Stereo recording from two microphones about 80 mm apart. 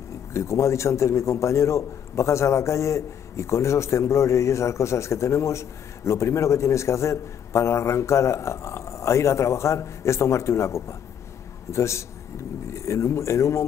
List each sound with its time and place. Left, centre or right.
0.3 s a man's voice: left